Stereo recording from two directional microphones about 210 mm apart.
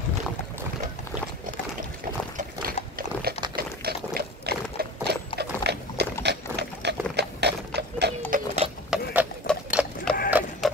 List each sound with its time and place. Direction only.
2.3 s pig: 45° right (ahead or behind)
3.5 s a sound: 45° right (ahead or behind)
6.2 s pig: 55° right (ahead or behind)
8.3 s dog: 40° right (ahead or behind)
8.9 s clip-clop: 5° right (ahead or behind)
9.5 s sewing machine: centre (ahead or behind)